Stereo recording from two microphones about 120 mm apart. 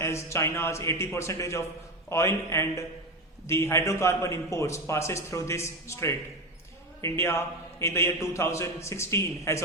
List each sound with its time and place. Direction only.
0.0 s a man's voice: 25° left (ahead or behind)